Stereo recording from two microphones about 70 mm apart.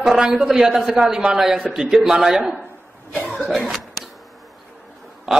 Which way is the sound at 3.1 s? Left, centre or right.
Centre.